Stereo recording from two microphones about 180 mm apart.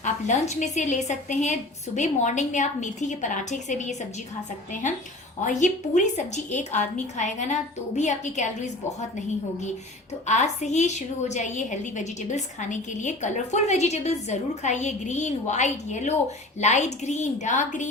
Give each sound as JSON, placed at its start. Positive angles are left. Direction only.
{"t": 0.0, "sound": "a woman's voice", "side_deg": 40}